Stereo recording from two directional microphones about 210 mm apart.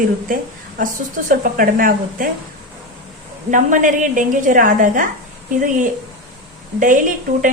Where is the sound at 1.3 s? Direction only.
40° right (ahead or behind).